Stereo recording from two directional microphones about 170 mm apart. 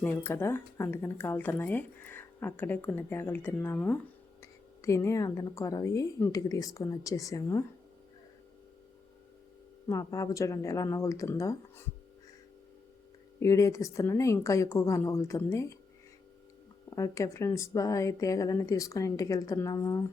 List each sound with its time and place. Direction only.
0.0 s speech: 10° left (ahead or behind)
9.9 s speech: 20° left (ahead or behind)
13.4 s speech: 20° left (ahead or behind)
16.9 s speech: 20° left (ahead or behind)